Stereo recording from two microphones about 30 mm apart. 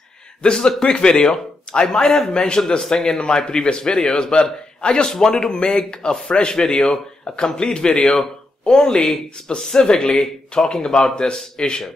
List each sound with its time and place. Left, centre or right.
0.4 s speech: left
1.1 s a man's voice: centre